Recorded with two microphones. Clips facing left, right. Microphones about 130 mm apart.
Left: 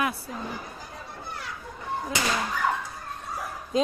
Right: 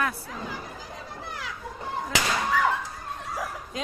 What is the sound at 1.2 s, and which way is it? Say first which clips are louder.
Children playing: even; 90° right.